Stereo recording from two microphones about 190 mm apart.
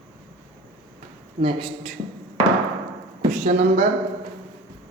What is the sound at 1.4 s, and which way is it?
Speech, 30° right (ahead or behind).